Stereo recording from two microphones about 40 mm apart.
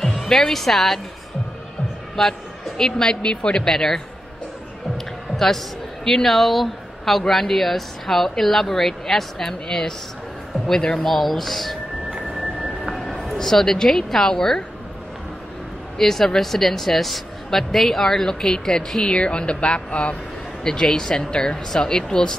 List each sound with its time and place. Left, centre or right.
0.2 s speech: centre
2.1 s a woman's voice: centre
3.2 s speech: left
3.7 s speech: centre
4.9 s a sound: centre
6.0 s speech: centre
11.0 s speech: centre
13.2 s speech: centre
16.0 s speech: centre; by 20.2 s left
20.6 s speech: centre